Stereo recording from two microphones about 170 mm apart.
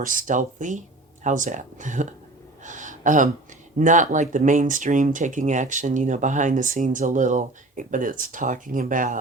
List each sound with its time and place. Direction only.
0.0 s speech: 55° right (ahead or behind)
2.6 s a sound: 45° right (ahead or behind)
3.8 s speech: 50° right (ahead or behind)